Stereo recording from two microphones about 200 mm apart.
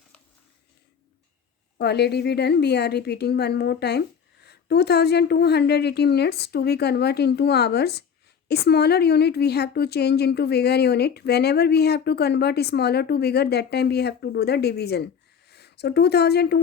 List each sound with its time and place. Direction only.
1.8 s a woman's voice: 55° left (ahead or behind)